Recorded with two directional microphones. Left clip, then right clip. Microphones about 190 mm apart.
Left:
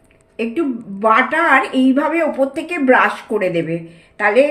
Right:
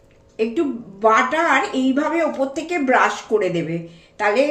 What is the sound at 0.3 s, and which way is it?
A woman's voice, 40° left (ahead or behind).